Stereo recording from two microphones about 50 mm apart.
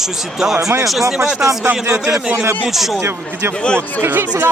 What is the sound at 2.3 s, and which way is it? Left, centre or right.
Speech, right.